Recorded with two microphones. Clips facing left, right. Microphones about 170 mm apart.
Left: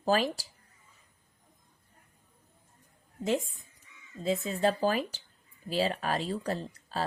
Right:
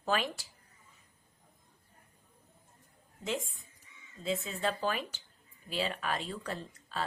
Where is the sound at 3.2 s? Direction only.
40° left (ahead or behind).